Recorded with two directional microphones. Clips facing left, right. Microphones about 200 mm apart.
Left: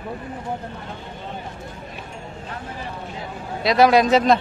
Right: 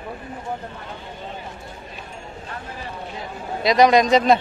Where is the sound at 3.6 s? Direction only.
5° left (ahead or behind).